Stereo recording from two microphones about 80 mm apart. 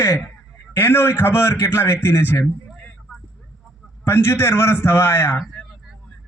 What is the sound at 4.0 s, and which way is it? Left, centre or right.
A man's voice, left.